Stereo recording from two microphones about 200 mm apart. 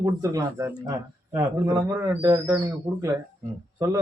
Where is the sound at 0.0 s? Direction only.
15° right (ahead or behind).